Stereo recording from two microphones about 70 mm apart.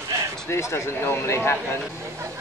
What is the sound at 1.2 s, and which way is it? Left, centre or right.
Speech, left.